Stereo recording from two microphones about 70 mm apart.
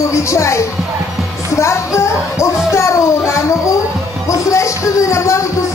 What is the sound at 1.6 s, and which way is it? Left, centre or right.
Speech, left.